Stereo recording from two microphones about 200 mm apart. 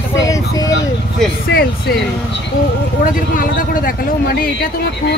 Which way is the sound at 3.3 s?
45° left (ahead or behind).